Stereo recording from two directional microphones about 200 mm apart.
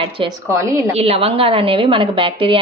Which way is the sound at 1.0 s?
30° right (ahead or behind).